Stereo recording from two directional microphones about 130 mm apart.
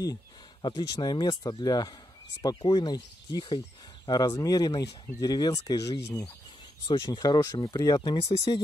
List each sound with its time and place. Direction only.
0.0 s speech: 30° left (ahead or behind)